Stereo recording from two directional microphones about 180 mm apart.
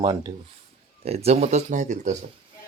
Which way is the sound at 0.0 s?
25° right (ahead or behind).